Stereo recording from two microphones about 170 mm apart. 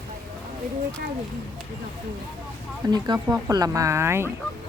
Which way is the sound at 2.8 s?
25° right (ahead or behind).